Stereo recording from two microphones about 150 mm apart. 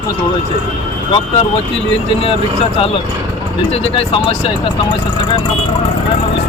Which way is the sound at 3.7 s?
40° left (ahead or behind).